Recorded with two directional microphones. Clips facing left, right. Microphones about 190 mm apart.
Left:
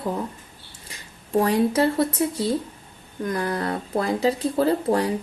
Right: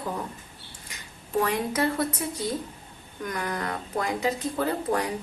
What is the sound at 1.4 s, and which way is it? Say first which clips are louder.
A woman's voice: left 6 dB; 35° left (ahead or behind).